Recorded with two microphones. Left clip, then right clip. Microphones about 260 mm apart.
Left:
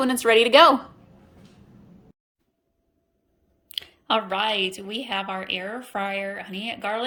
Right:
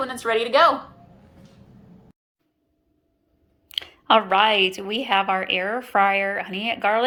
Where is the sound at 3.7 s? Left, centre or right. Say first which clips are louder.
Right 6 dB; centre.